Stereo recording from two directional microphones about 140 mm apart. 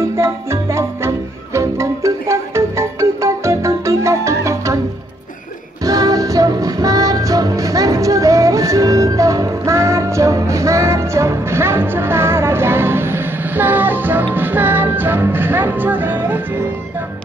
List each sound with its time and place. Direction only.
0.1 s music: 20° right (ahead or behind)
5.9 s music: 25° right (ahead or behind)